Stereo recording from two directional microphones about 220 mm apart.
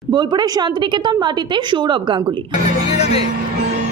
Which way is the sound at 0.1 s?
20° right (ahead or behind).